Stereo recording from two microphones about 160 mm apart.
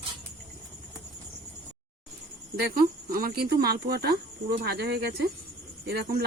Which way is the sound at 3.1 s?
70° right (ahead or behind).